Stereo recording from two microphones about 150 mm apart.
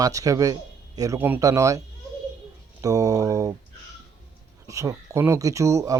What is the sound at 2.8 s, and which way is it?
Speech, 20° right (ahead or behind).